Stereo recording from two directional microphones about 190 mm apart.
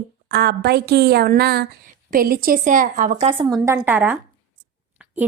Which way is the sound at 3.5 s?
15° right (ahead or behind).